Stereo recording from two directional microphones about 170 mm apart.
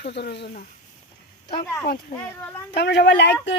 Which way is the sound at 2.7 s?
75° left (ahead or behind).